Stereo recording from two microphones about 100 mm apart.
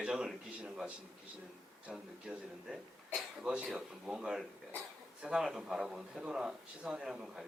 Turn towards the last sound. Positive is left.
turn(degrees=-5)  # may be behind; listen again after turning